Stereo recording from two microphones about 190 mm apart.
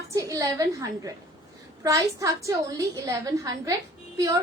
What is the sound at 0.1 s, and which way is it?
A woman's voice, 15° right (ahead or behind).